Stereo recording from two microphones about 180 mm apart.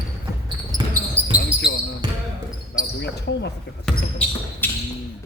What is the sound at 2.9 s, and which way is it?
Speech, 70° left (ahead or behind).